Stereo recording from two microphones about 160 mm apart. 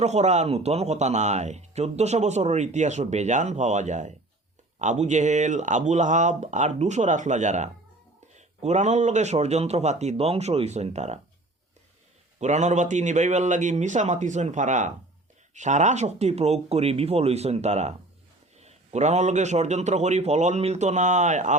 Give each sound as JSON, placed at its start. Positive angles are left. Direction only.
{"t": 0.0, "sound": "speech", "side_deg": -45}
{"t": 12.4, "sound": "speech", "side_deg": -45}